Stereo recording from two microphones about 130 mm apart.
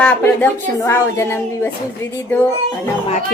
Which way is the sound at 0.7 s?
20° left (ahead or behind).